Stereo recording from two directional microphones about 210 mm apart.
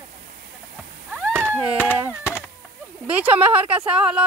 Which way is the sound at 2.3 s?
10° left (ahead or behind).